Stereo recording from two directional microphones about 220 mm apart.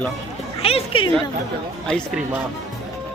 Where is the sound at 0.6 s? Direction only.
25° left (ahead or behind).